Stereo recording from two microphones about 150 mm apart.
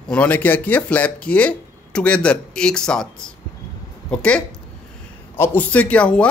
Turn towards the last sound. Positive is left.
turn(degrees=5)  # may be behind; listen again after turning